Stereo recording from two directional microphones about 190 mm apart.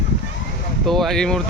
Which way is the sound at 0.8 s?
Centre (ahead or behind).